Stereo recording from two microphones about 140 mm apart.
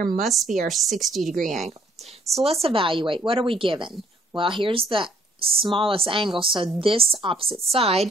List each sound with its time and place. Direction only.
0.2 s speech: centre (ahead or behind)
1.3 s speech: 70° right (ahead or behind)
2.3 s speech: 45° right (ahead or behind)